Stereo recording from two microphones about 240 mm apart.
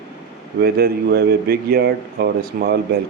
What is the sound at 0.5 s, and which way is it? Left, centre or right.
A man's voice, right.